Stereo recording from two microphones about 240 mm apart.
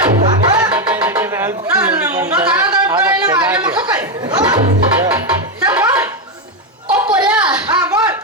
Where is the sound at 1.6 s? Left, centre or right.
Centre.